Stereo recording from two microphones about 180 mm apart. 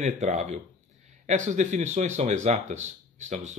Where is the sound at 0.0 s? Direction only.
40° right (ahead or behind).